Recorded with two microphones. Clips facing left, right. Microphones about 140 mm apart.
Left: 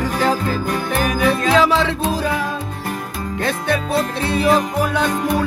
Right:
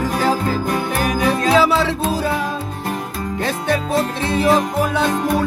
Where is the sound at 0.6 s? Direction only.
25° right (ahead or behind).